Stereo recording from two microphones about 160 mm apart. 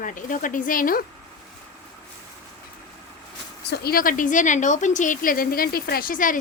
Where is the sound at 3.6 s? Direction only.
85° left.